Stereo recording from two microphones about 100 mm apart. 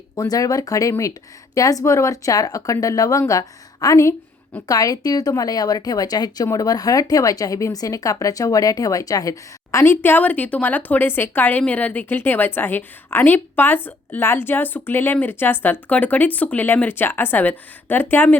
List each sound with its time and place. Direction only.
0.2 s speech: 35° left (ahead or behind)
9.8 s a woman's voice: 20° left (ahead or behind)